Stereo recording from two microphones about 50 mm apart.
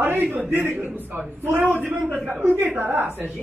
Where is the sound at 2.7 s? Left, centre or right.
Right.